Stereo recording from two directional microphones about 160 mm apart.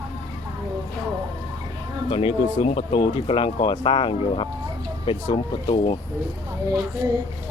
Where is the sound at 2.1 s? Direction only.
35° left (ahead or behind).